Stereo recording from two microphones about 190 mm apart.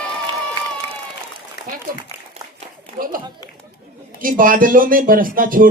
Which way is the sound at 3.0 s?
50° right (ahead or behind).